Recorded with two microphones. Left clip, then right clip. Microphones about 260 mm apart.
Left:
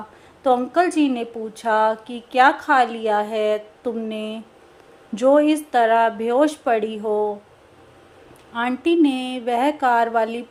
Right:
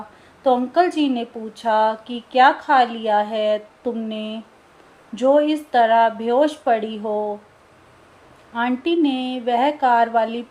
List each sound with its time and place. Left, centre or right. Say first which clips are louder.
0.4 s a woman's voice: right 1 dB; left
6.8 s speech: left 2 dB; left
8.5 s a woman's voice: left 1 dB; left